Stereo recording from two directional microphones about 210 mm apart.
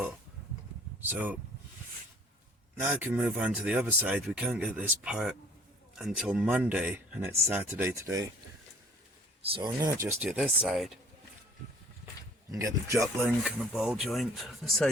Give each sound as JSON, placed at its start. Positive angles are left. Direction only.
{"t": 1.0, "sound": "speech", "side_deg": -10}
{"t": 2.8, "sound": "speech", "side_deg": -10}
{"t": 9.5, "sound": "speech", "side_deg": -20}
{"t": 12.5, "sound": "speech", "side_deg": -15}
{"t": 13.4, "sound": "speech", "side_deg": 0}